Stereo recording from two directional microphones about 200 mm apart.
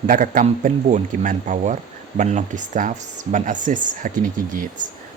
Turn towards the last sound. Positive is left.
turn(degrees=-45)  # may be behind; listen again after turning